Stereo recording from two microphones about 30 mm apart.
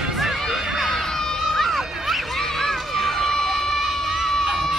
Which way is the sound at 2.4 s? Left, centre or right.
Centre.